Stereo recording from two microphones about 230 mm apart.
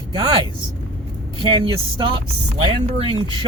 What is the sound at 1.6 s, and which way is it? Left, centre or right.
Speech, right.